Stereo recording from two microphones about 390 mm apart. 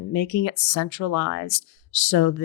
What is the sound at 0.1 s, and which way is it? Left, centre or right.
Speech, left.